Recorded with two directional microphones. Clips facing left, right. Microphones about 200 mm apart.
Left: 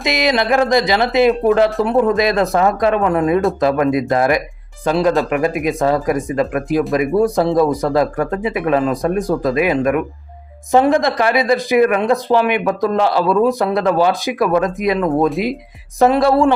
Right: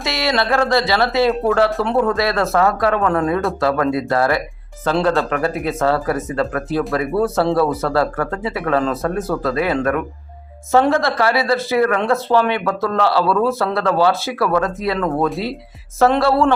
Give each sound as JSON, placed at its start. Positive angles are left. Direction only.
{"t": 0.0, "sound": "speech", "side_deg": 15}